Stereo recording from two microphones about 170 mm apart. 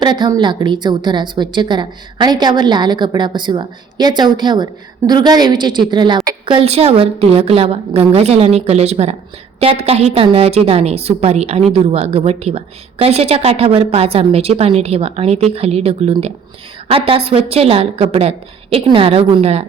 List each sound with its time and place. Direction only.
0.0 s a woman's voice: 25° right (ahead or behind)